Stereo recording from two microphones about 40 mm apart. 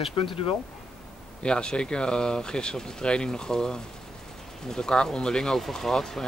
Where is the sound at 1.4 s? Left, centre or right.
Left.